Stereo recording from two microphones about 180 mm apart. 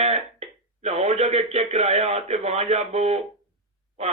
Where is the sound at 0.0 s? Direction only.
35° right (ahead or behind).